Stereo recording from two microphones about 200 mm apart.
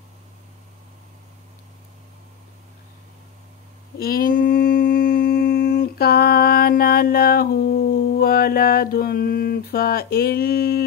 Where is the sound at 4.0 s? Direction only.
45° left (ahead or behind).